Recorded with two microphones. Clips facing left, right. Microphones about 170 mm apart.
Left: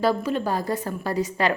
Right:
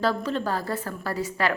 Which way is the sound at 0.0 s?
10° left (ahead or behind).